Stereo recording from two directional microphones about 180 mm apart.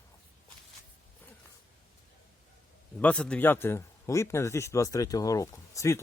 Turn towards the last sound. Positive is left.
turn(degrees=15)  # may be behind; listen again after turning